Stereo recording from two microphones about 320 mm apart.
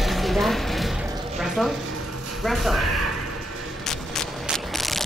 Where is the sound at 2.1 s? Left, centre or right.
Right.